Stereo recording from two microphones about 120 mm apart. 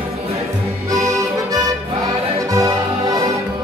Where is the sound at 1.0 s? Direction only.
25° right (ahead or behind).